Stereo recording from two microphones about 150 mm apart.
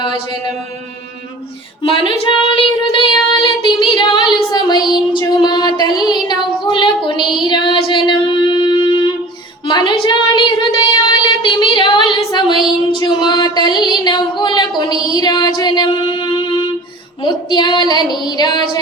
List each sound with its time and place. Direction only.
0.0 s music: 30° left (ahead or behind)
1.8 s child singing: 35° left (ahead or behind)
5.2 s music: 30° left (ahead or behind)
9.6 s a sound: 30° left (ahead or behind)
15.2 s female singing: 30° left (ahead or behind)